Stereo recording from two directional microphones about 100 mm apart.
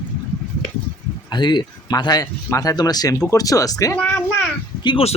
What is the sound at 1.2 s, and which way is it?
Speech, 50° left (ahead or behind).